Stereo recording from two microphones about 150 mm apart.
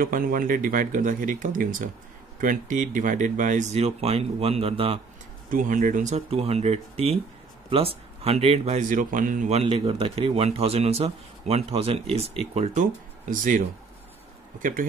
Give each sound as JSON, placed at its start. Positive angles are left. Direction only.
{"t": 0.0, "sound": "speech", "side_deg": -70}
{"t": 5.5, "sound": "speech", "side_deg": -65}
{"t": 12.7, "sound": "speech", "side_deg": -60}